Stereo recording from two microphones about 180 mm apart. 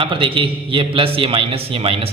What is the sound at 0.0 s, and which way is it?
A man's voice, 30° right (ahead or behind).